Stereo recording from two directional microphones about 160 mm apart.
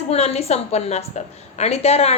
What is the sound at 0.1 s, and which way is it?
A woman's voice, 40° left (ahead or behind).